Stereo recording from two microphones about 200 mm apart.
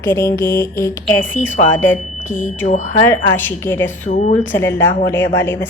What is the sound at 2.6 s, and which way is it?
Speech, 35° left (ahead or behind).